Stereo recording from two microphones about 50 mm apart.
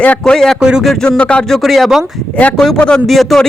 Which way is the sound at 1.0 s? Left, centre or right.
Left.